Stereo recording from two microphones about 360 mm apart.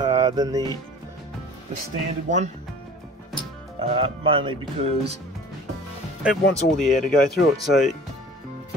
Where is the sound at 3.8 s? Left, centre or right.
Centre.